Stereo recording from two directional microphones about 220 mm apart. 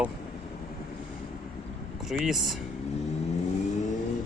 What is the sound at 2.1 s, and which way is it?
Speech, centre (ahead or behind).